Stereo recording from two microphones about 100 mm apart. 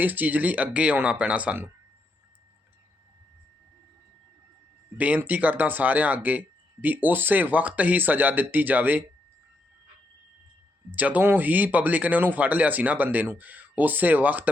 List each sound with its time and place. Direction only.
0.0 s speech: 15° right (ahead or behind)
4.9 s speech: 15° right (ahead or behind)
10.9 s speech: 15° right (ahead or behind)